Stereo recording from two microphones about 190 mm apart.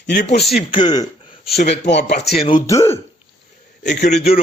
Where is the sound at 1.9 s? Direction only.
65° left (ahead or behind).